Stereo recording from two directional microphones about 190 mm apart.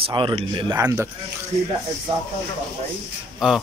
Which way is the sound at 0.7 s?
15° right (ahead or behind).